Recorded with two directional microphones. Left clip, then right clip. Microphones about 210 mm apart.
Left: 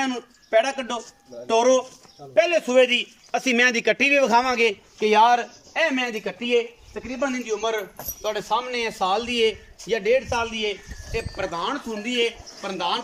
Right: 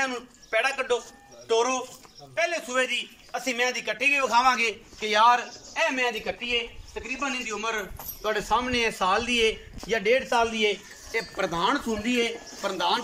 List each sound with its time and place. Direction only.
0.0 s a man's voice: 35° left (ahead or behind); by 13.0 s 5° left (ahead or behind)